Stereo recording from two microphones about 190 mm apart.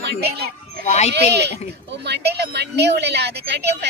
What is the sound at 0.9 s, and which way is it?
Speech, 35° left (ahead or behind).